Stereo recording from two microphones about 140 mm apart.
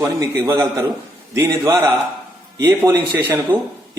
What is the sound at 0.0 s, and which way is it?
A man's voice, 25° right (ahead or behind).